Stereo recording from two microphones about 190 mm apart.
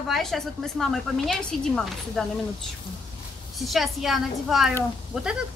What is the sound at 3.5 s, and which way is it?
A woman's voice, centre (ahead or behind).